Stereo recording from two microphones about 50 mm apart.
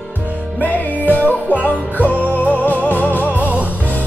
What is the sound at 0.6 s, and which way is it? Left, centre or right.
Music, left.